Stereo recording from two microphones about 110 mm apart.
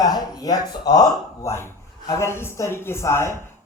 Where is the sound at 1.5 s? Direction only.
25° left (ahead or behind).